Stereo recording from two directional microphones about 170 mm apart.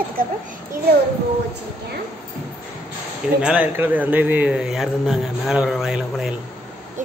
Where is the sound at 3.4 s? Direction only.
10° right (ahead or behind).